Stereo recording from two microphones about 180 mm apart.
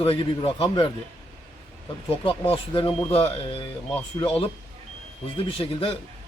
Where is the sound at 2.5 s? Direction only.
30° left (ahead or behind).